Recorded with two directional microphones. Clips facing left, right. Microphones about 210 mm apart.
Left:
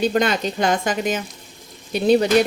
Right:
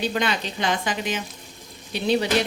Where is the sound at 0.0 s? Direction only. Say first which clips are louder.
Left 6 dB; 45° left (ahead or behind).